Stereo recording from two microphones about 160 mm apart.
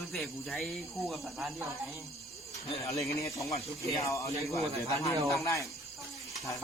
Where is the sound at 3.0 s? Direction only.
20° left (ahead or behind).